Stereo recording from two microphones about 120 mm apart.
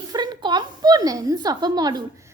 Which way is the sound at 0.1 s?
35° right (ahead or behind).